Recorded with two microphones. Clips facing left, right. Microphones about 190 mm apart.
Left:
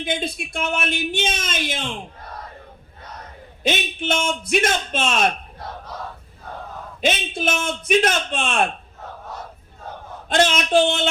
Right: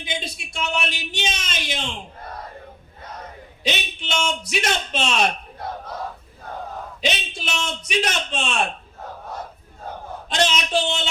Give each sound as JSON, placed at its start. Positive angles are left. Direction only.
{"t": 0.0, "sound": "a man's voice", "side_deg": 55}
{"t": 3.6, "sound": "a man's voice", "side_deg": 50}
{"t": 7.0, "sound": "a man's voice", "side_deg": 50}
{"t": 10.2, "sound": "a man's voice", "side_deg": 55}